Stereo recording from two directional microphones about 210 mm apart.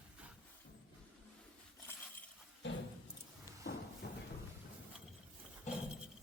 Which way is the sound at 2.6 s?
60° left (ahead or behind).